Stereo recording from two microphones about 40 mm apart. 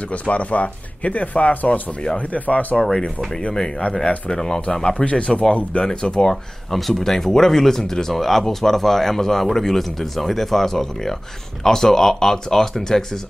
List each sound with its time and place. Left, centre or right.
0.1 s speech: left
1.7 s speech: left
2.1 s speech: left
2.8 s speech: centre
4.8 s speech: left
6.3 s speech: centre